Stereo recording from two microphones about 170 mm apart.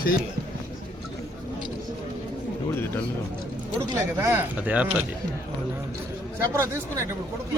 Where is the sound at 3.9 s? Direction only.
15° right (ahead or behind).